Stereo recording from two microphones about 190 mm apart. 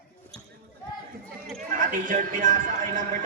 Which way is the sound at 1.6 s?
45° right (ahead or behind).